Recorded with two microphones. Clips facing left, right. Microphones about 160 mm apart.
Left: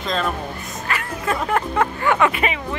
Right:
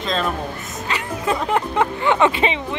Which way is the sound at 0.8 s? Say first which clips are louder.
Right 2 dB; 20° right (ahead or behind).